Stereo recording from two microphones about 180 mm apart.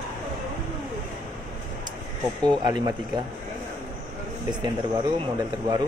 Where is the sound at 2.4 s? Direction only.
25° right (ahead or behind).